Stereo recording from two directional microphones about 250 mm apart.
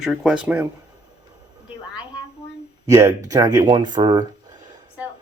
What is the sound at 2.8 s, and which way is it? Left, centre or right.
Speech, centre.